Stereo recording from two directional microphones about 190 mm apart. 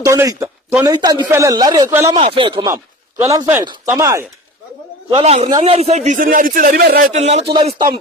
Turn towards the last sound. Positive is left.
turn(degrees=-25)  # may be behind; listen again after turning